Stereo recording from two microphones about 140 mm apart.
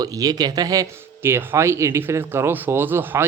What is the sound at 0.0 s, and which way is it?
Speech, 25° right (ahead or behind).